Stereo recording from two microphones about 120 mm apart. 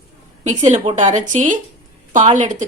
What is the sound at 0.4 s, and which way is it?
Speech, 80° right.